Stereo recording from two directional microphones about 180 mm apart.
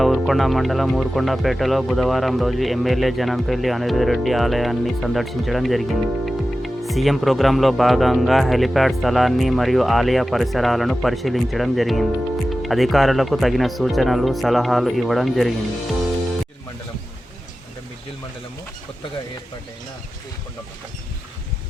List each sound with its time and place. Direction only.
0.0 s speech: centre (ahead or behind)